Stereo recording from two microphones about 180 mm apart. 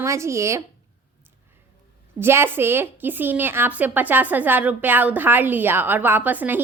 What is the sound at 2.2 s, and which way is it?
A woman's voice, 15° right (ahead or behind).